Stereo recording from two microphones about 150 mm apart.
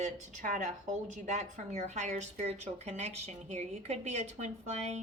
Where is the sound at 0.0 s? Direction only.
55° right (ahead or behind).